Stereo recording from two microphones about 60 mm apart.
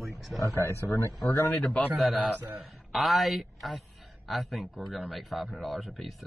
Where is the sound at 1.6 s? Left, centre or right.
Left.